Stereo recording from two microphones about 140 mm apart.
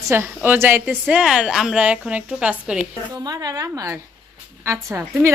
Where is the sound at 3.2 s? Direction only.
25° right (ahead or behind).